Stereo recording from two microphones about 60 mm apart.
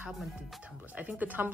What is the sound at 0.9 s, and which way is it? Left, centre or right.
Speech, right.